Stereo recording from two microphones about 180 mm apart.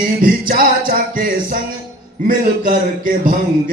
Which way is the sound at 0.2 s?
50° right (ahead or behind).